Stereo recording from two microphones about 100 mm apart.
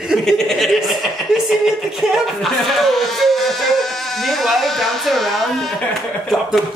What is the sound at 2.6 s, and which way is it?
Speech, centre (ahead or behind).